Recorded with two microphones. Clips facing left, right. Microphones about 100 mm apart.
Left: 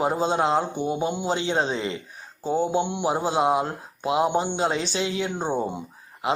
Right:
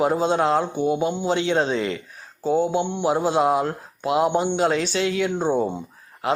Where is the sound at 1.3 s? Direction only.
30° left (ahead or behind).